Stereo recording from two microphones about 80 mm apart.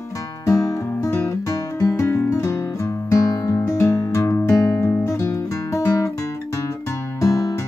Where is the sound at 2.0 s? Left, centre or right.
Left.